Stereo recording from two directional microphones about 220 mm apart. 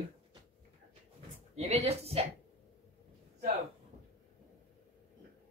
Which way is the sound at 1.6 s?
30° right (ahead or behind).